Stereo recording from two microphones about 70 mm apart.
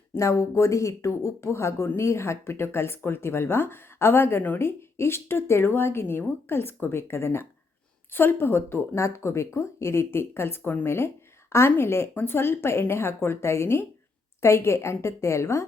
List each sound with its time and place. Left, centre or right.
0.2 s speech: left